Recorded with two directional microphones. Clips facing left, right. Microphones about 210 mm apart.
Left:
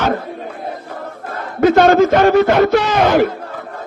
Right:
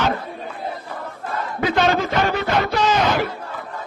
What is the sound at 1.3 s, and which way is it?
Speech, 45° left (ahead or behind).